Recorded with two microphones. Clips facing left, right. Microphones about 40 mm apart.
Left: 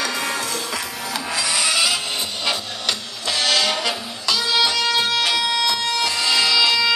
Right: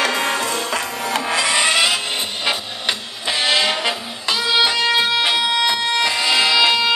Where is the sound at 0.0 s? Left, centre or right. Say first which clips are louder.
Right 5 dB; right.